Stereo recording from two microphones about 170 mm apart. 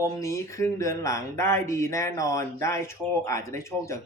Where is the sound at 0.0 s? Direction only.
20° left (ahead or behind).